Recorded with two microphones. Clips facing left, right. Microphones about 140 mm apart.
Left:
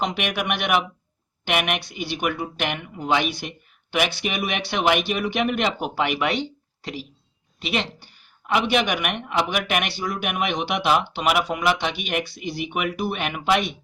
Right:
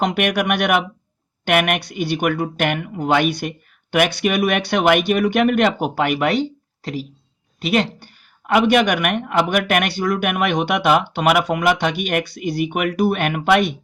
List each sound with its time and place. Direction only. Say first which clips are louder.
0.0 s speech: right 6 dB; 55° right (ahead or behind)